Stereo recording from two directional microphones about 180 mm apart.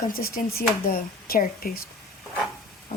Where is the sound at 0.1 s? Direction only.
55° left (ahead or behind).